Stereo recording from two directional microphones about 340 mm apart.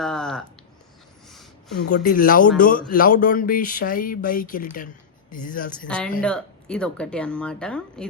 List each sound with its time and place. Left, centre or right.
0.0 s a sound: centre
1.9 s speech: left
6.1 s speech: centre